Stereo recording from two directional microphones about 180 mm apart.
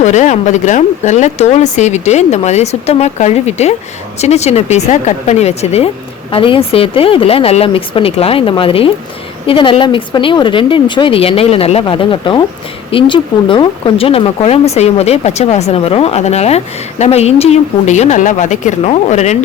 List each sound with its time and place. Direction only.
0.0 s speech: 40° left (ahead or behind)